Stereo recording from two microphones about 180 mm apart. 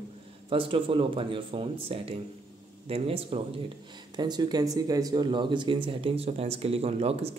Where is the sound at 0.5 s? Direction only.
30° right (ahead or behind).